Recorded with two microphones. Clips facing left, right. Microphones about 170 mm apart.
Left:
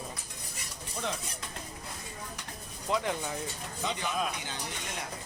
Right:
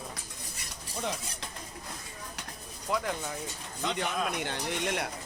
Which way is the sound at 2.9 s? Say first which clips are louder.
Left 1 dB; centre (ahead or behind).